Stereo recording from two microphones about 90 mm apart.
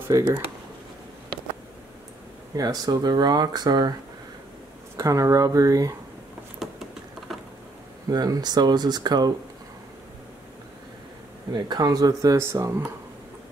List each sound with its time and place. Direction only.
0.1 s speech: 50° right (ahead or behind)
2.5 s speech: 45° right (ahead or behind)
4.9 s speech: 35° right (ahead or behind)
6.6 s a sound: centre (ahead or behind)
8.1 s speech: 50° right (ahead or behind)
11.5 s speech: 50° right (ahead or behind); by 12.8 s 35° right (ahead or behind)